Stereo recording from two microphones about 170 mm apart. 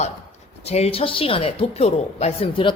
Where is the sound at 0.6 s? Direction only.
35° left (ahead or behind).